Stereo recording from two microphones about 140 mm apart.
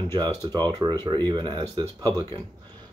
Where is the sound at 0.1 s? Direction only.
30° right (ahead or behind).